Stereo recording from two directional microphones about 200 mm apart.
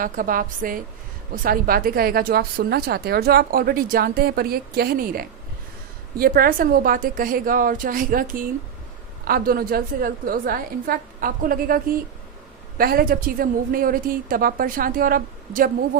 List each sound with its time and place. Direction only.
0.0 s speech: 45° right (ahead or behind)